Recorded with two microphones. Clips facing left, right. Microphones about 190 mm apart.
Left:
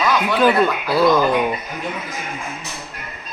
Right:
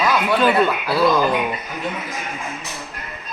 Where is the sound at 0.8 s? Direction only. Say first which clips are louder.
Left 2 dB; 5° right (ahead or behind).